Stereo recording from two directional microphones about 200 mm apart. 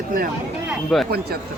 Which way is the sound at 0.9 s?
Centre (ahead or behind).